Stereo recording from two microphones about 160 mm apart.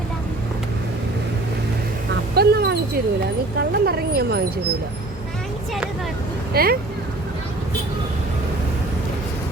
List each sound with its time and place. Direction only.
2.3 s a sound: 90° right
3.6 s speech: 75° right (ahead or behind)
6.5 s speech: 70° right (ahead or behind)